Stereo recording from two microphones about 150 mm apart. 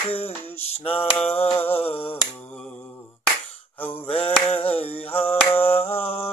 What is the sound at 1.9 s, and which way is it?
Finger snapping, 15° left (ahead or behind).